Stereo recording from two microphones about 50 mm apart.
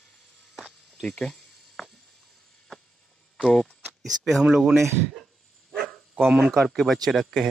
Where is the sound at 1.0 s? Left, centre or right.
Left.